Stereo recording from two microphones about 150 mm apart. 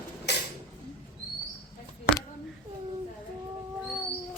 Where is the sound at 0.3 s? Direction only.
90° left.